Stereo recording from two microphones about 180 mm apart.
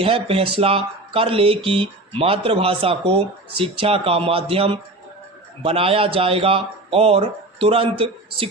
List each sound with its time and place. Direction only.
0.0 s speech: 30° right (ahead or behind)